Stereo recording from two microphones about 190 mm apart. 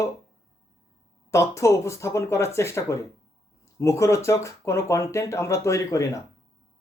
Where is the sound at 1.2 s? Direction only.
15° left (ahead or behind).